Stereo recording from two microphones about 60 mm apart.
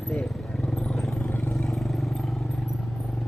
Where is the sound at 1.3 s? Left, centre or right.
Left.